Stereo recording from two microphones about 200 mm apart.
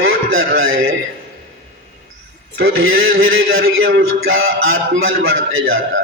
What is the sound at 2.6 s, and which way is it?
A man's voice, 80° right.